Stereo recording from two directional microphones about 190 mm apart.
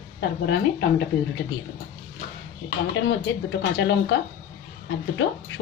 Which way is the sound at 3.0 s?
75° left (ahead or behind).